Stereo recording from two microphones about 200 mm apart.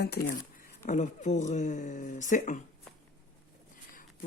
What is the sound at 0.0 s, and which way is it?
Speech, 55° left (ahead or behind).